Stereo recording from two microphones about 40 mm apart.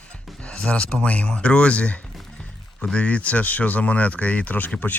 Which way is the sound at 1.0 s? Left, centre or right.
Left.